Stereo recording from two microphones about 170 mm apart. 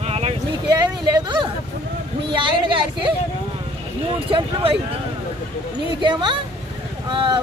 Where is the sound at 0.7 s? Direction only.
25° right (ahead or behind).